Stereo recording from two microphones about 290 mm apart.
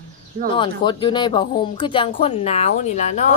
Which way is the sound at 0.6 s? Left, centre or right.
Centre.